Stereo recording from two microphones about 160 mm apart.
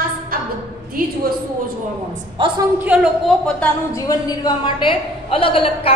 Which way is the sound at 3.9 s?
25° left (ahead or behind).